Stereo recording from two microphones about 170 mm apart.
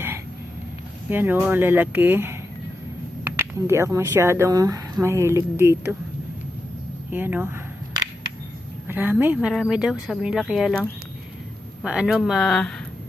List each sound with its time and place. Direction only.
1.1 s speech: 10° right (ahead or behind)
7.1 s speech: 10° right (ahead or behind)
8.9 s speech: 10° right (ahead or behind)